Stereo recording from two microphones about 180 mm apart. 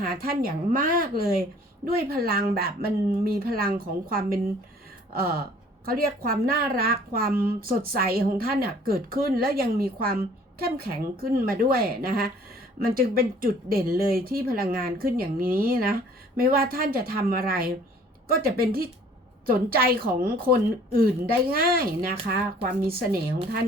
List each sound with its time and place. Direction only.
0.0 s a woman's voice: 55° right (ahead or behind)